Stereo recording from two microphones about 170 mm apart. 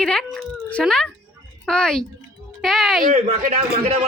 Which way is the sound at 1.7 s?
5° left (ahead or behind).